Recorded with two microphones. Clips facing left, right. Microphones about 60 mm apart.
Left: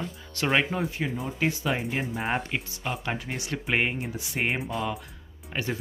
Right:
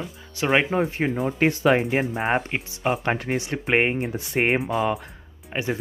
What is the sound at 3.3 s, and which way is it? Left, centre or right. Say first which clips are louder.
Speech: right 5 dB; right.